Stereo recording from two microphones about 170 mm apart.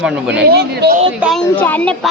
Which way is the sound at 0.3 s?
75° right (ahead or behind).